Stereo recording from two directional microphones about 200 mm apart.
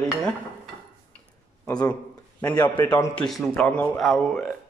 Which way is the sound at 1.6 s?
20° left (ahead or behind).